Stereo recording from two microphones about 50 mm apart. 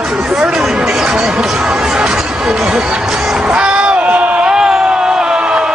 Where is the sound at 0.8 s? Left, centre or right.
Centre; by 4.4 s right.